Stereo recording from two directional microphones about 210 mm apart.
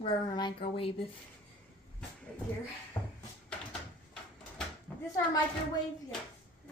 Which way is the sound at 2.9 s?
20° left (ahead or behind).